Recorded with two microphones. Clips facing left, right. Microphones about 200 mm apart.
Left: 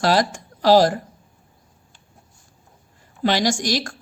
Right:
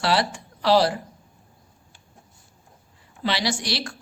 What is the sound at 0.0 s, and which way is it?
Speech, 45° left (ahead or behind).